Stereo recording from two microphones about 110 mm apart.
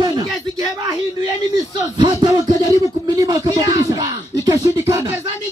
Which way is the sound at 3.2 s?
35° right (ahead or behind).